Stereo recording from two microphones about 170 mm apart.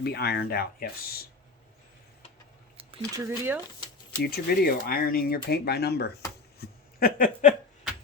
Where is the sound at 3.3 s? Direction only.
10° right (ahead or behind).